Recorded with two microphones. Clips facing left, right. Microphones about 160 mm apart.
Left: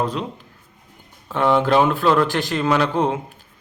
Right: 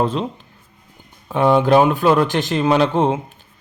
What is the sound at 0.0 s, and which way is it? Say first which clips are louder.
Speech: right 4 dB; 25° right (ahead or behind).